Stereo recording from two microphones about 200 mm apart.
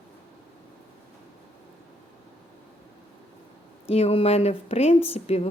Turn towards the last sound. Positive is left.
turn(degrees=30)  # may be behind; listen again after turning